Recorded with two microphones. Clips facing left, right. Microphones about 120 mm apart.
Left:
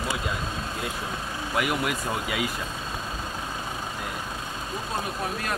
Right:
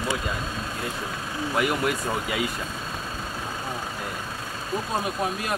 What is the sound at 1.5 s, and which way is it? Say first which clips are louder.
Speech: right 2 dB; 5° left (ahead or behind).